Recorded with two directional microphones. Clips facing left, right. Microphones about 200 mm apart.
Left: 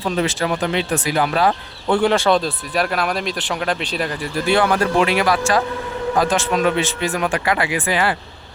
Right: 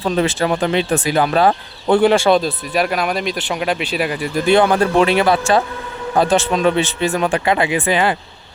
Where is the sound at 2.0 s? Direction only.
10° right (ahead or behind).